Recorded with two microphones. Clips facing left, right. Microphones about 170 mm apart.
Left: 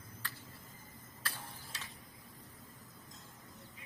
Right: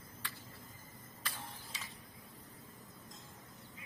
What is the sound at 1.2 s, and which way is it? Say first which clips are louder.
Tick-tock: even; centre (ahead or behind).